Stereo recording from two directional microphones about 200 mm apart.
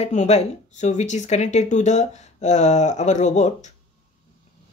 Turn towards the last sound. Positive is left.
turn(degrees=35)  # may be behind; listen again after turning